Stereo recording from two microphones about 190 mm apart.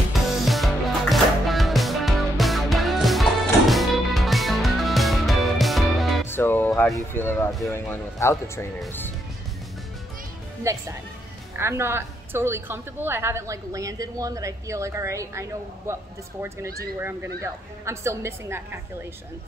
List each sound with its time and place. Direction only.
0.5 s music: centre (ahead or behind)
6.2 s music: 10° left (ahead or behind)
7.7 s speech: 15° left (ahead or behind)
10.6 s a woman's voice: 15° right (ahead or behind)